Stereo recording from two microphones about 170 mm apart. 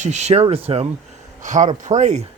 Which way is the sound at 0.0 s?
40° right (ahead or behind).